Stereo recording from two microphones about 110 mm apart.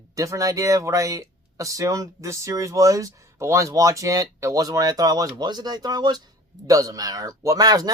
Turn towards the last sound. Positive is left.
turn(degrees=-35)  # may be behind; listen again after turning